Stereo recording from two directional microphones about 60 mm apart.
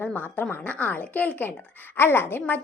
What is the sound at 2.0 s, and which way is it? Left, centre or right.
Speech, left.